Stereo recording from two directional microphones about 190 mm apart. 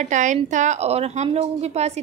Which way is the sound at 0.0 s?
40° right (ahead or behind).